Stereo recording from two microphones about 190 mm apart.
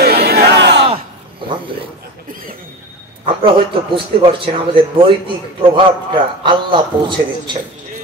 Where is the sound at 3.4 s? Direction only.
25° right (ahead or behind).